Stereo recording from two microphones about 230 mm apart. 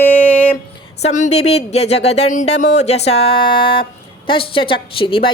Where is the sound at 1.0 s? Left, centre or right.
Left.